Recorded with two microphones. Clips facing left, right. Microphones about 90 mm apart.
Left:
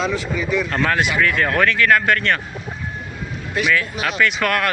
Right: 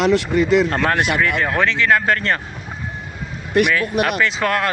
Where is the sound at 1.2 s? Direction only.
20° right (ahead or behind).